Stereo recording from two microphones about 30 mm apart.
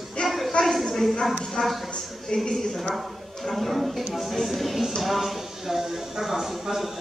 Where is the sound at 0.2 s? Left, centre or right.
Left.